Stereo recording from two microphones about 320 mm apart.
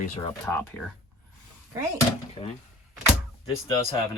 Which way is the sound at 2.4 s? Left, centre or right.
Centre.